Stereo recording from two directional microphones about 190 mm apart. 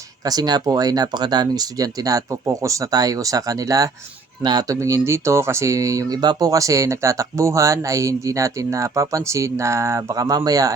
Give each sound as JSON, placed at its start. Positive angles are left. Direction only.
{"t": 0.3, "sound": "speech", "side_deg": -20}